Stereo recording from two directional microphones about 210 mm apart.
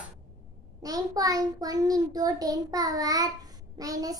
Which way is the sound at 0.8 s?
15° right (ahead or behind).